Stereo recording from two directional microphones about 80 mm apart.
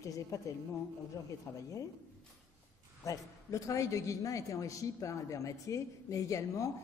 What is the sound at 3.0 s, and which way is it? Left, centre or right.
A man's voice, left.